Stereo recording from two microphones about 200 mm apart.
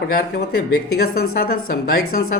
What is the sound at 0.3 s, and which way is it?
A woman's voice, 50° left (ahead or behind).